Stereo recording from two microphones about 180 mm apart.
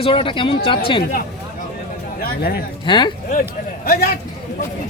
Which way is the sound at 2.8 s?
25° left (ahead or behind).